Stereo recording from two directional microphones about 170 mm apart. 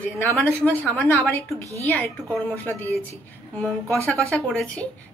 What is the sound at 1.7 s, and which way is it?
Speech, 20° right (ahead or behind).